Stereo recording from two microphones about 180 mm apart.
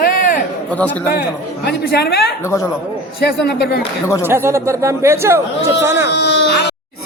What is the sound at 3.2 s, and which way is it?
Speech, 65° left (ahead or behind).